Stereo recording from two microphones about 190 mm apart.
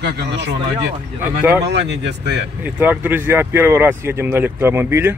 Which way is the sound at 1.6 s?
65° right (ahead or behind).